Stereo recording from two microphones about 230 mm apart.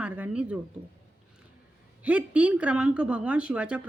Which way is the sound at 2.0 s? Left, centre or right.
Centre.